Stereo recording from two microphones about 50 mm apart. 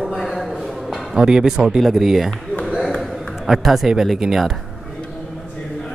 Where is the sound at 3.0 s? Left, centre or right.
Centre.